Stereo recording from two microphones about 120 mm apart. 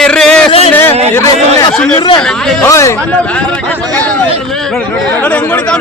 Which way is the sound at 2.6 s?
25° left (ahead or behind).